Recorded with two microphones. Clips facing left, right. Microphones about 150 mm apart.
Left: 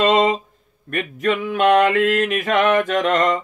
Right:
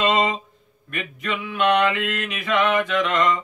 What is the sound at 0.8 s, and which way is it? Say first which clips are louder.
Mantra: left 8 dB; 45° left (ahead or behind).